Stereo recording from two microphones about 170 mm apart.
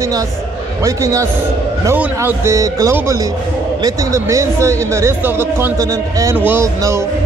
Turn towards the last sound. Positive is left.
turn(degrees=-15)  # may be behind; listen again after turning